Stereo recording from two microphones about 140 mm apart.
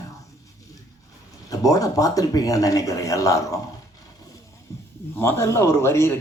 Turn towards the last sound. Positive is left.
turn(degrees=20)  # may be behind; listen again after turning